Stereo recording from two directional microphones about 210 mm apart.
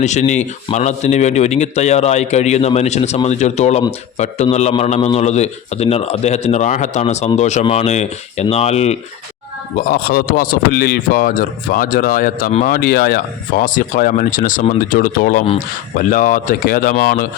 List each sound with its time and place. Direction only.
0.0 s speech: 35° left (ahead or behind)
9.7 s a man's voice: 40° left (ahead or behind)